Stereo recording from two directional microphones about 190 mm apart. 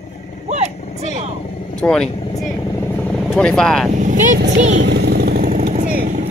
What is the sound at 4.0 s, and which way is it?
Speech, 40° right (ahead or behind).